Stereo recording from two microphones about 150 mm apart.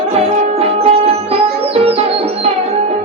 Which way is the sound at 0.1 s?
40° right (ahead or behind).